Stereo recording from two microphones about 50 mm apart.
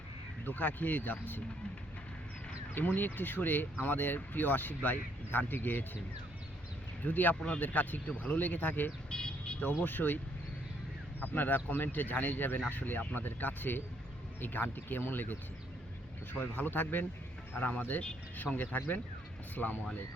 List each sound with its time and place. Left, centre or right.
0.4 s speech: left
2.7 s speech: left
7.0 s speech: left
9.0 s vehicle: centre
9.6 s speech: left
11.2 s speech: left